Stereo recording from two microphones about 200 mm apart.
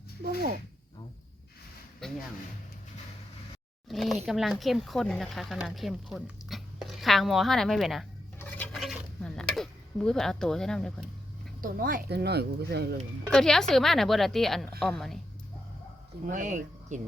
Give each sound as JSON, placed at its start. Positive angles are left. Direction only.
{"t": 2.0, "sound": "a sound", "side_deg": 0}
{"t": 3.8, "sound": "speech", "side_deg": 0}
{"t": 8.4, "sound": "dishes", "side_deg": 10}
{"t": 11.6, "sound": "speech", "side_deg": -45}
{"t": 13.3, "sound": "speech", "side_deg": 0}
{"t": 16.2, "sound": "speech", "side_deg": -40}